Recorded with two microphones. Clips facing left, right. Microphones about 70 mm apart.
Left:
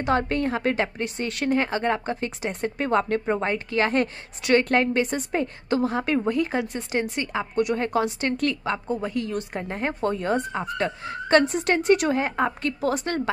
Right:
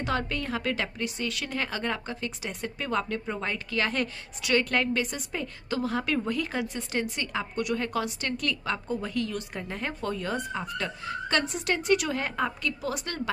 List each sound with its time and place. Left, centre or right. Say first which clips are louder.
0.0 s a woman's voice: left 7 dB; left
1.6 s a woman's voice: left 7 dB; left
12.6 s a woman's voice: left 7 dB; left